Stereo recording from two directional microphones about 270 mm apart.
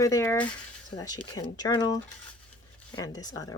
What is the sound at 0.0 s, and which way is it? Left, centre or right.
Speech, centre.